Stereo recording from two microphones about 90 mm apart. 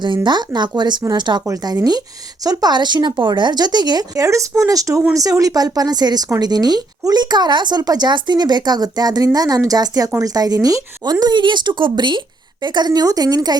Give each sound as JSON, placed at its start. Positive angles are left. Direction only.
{"t": 0.3, "sound": "a woman's voice", "side_deg": -55}
{"t": 1.5, "sound": "speech", "side_deg": -45}